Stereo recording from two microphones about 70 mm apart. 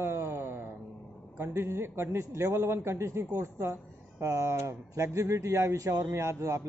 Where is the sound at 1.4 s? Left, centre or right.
Right.